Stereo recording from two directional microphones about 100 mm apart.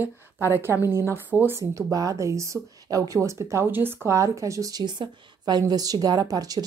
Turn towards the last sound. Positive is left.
turn(degrees=-40)  # may be behind; listen again after turning